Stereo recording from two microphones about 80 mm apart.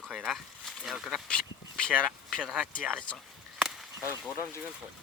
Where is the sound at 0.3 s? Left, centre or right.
Centre.